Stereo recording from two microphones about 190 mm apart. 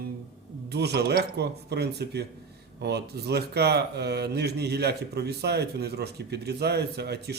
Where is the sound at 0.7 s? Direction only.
60° right (ahead or behind).